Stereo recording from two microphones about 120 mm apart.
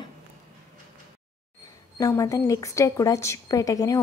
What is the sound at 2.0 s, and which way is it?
A woman's voice, 25° left (ahead or behind).